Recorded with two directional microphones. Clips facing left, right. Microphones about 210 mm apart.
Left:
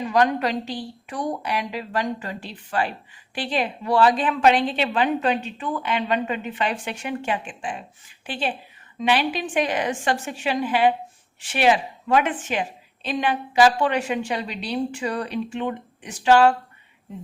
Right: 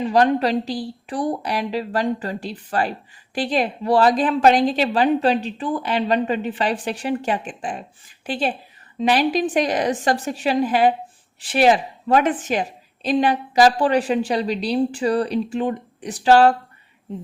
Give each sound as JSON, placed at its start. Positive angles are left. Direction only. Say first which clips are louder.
{"t": 0.0, "sound": "a woman's voice", "louder": "right 3 dB", "side_deg": -30}